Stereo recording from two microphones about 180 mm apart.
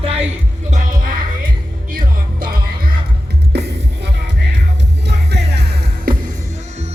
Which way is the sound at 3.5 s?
70° right (ahead or behind).